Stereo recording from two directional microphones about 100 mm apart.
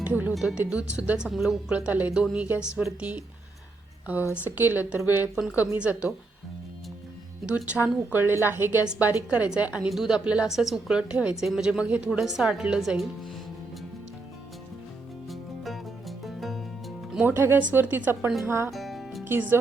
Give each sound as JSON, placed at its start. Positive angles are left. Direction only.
{"t": 0.0, "sound": "a woman's voice", "side_deg": -15}
{"t": 1.7, "sound": "a woman's voice", "side_deg": -15}
{"t": 5.3, "sound": "a woman's voice", "side_deg": -10}
{"t": 7.4, "sound": "a woman's voice", "side_deg": -15}
{"t": 15.3, "sound": "music", "side_deg": 0}
{"t": 17.2, "sound": "a woman's voice", "side_deg": -20}
{"t": 18.7, "sound": "music", "side_deg": 0}
{"t": 19.2, "sound": "speech", "side_deg": -20}